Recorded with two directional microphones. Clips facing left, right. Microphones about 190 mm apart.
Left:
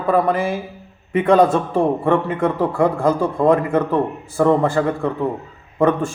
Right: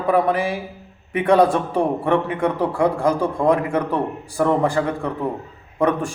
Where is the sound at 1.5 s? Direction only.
15° right (ahead or behind).